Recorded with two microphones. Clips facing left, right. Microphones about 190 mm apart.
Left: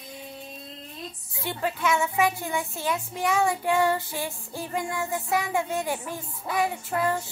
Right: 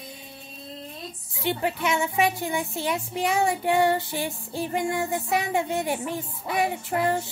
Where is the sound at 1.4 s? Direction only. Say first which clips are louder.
Right 2 dB; 20° right (ahead or behind).